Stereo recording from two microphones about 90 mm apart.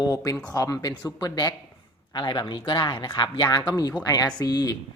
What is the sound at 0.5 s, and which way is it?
Speech, 40° left (ahead or behind).